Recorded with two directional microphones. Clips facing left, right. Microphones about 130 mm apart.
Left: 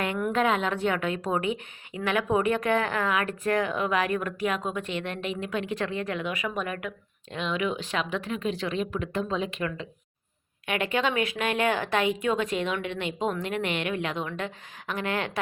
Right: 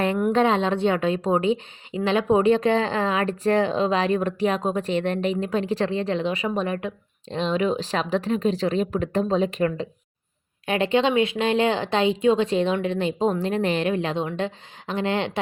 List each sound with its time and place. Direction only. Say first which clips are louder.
0.3 s a woman's voice: right 3 dB; 30° right (ahead or behind)